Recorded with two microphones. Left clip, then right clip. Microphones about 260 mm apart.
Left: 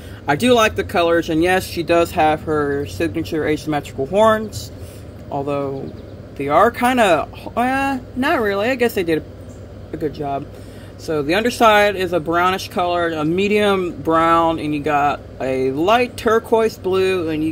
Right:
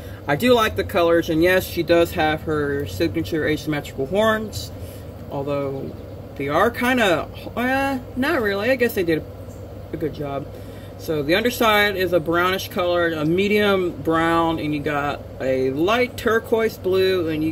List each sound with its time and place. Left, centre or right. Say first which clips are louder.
0.3 s speech: left 3 dB; left